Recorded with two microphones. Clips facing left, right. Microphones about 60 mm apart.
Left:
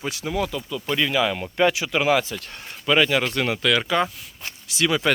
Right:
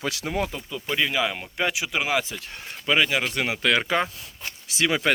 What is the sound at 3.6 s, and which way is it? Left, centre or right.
Speech, right.